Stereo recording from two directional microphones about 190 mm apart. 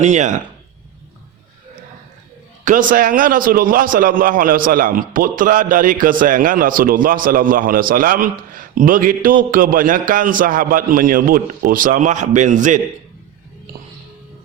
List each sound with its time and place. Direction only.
0.0 s speech: 40° right (ahead or behind)
2.6 s a man's voice: 45° right (ahead or behind)